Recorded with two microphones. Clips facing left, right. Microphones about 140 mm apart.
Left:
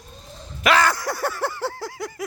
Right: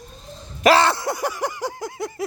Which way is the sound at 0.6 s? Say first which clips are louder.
Right 3 dB; 30° right (ahead or behind).